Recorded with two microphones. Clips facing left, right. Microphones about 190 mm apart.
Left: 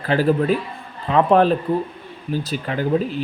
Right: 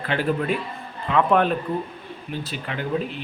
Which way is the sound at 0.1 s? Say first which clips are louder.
Left 6 dB; 35° left (ahead or behind).